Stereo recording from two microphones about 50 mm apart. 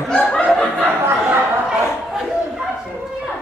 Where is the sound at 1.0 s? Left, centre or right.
Right.